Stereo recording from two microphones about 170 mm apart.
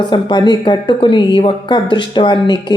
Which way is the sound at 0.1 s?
25° left (ahead or behind).